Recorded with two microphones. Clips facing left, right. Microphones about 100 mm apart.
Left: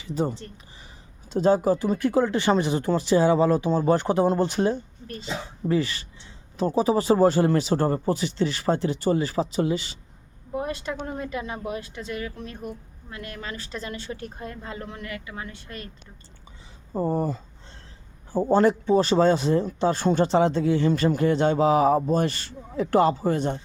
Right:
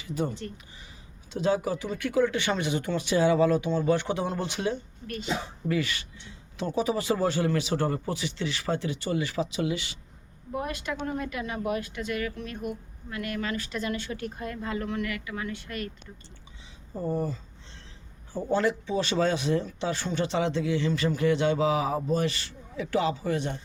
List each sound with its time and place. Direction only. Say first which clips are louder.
0.0 s speech: left 3 dB; 40° left (ahead or behind)
16.9 s speech: left 5 dB; 50° left (ahead or behind)